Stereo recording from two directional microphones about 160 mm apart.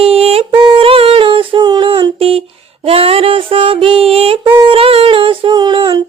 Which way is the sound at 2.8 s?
35° right (ahead or behind).